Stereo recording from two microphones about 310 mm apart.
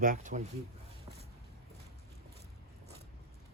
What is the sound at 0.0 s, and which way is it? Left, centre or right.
Speech, right.